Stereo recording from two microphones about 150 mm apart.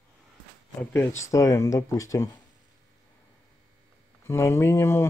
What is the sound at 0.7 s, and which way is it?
Speech, 15° left (ahead or behind).